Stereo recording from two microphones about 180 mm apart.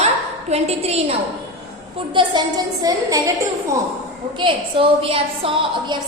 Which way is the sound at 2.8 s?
20° right (ahead or behind).